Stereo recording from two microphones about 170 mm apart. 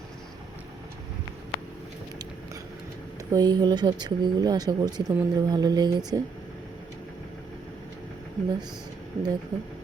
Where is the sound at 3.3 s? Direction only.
25° right (ahead or behind).